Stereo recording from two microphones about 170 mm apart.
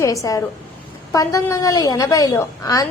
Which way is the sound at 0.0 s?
20° left (ahead or behind).